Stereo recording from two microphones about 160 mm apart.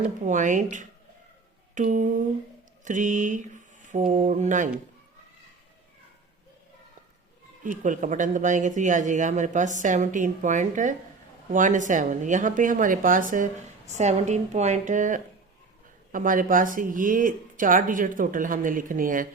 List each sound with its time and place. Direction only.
0.3 s speech: 50° right (ahead or behind)
7.6 s speech: 55° right (ahead or behind)